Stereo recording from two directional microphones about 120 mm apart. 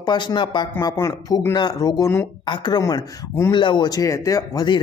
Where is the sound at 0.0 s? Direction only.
35° left (ahead or behind).